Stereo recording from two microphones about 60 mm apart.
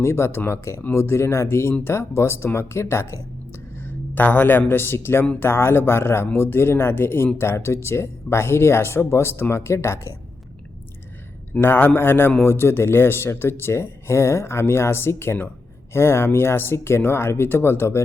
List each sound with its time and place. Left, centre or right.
0.0 s speech: left
3.8 s speech: left
11.6 s a man's voice: left